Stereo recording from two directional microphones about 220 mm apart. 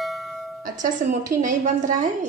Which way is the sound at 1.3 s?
35° right (ahead or behind).